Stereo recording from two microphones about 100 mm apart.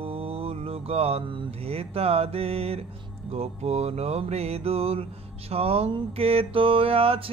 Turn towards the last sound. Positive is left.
turn(degrees=-70)  # may be behind; listen again after turning